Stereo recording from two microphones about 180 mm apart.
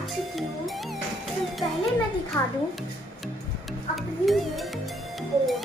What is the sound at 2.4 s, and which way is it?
Speech, 15° left (ahead or behind).